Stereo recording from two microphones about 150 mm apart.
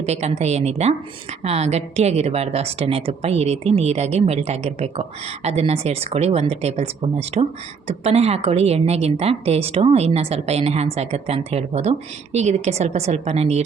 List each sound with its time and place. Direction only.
0.0 s a woman's voice: 45° right (ahead or behind)